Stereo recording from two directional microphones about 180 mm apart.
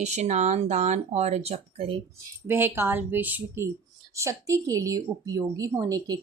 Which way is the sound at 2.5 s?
15° right (ahead or behind).